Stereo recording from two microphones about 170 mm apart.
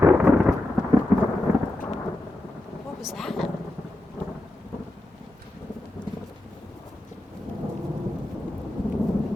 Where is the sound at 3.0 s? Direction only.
Centre (ahead or behind).